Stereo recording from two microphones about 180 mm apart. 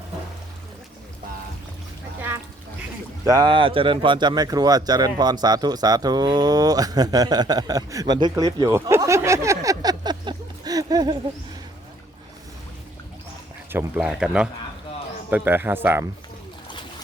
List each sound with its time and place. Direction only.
3.2 s speech: 20° right (ahead or behind)
13.7 s speech: 10° right (ahead or behind)